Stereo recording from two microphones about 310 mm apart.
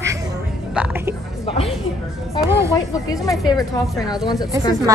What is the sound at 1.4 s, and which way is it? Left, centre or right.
Speech, centre.